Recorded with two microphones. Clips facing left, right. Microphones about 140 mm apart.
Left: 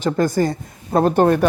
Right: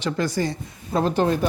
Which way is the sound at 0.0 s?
50° left (ahead or behind).